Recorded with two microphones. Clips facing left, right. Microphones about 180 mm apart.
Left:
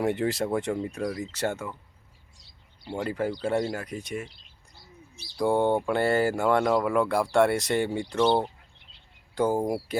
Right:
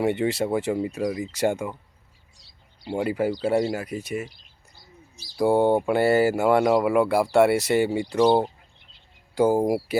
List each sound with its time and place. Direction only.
0.0 s speech: centre (ahead or behind)
2.9 s speech: 10° right (ahead or behind)
4.3 s bird: 65° left (ahead or behind)
5.4 s speech: 10° right (ahead or behind)